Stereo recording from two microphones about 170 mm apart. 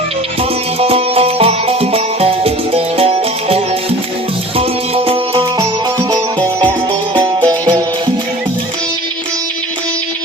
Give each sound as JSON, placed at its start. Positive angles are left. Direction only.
{"t": 0.8, "sound": "music", "side_deg": -35}